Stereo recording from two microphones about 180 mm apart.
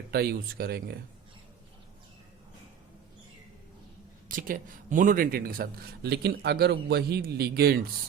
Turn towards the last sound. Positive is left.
turn(degrees=-60)  # may be behind; listen again after turning